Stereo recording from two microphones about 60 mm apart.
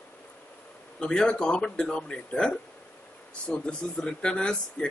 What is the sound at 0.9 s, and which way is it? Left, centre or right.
Speech, centre.